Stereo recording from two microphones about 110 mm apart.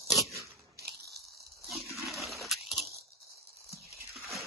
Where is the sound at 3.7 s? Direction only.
25° right (ahead or behind).